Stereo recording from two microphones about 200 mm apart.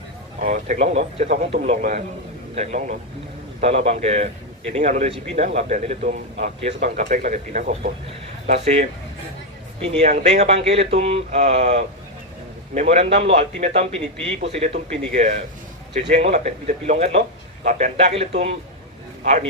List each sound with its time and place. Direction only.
0.4 s speech: 40° right (ahead or behind)